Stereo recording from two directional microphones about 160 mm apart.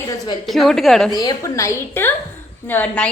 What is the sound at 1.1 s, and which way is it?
A woman's voice, 25° left (ahead or behind).